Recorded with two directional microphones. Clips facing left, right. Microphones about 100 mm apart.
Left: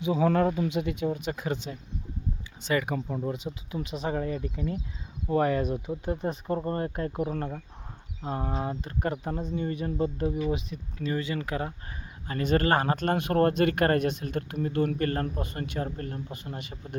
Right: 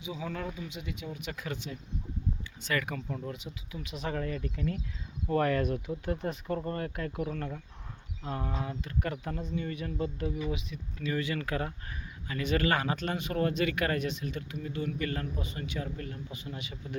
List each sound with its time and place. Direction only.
0.0 s speech: 60° left (ahead or behind)
1.2 s speech: 30° left (ahead or behind)
2.6 s speech: 20° left (ahead or behind)
12.3 s speech: 40° left (ahead or behind)